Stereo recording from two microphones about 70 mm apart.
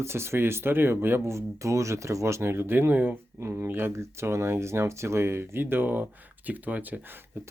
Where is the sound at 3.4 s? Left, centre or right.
Right.